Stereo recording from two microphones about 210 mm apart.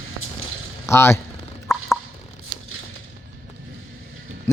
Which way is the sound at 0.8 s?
10° left (ahead or behind).